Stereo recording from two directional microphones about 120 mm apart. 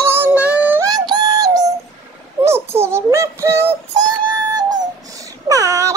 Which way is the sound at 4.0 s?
35° right (ahead or behind).